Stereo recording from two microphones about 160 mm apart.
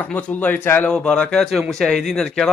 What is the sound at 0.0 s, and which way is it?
A man's voice, 10° left (ahead or behind).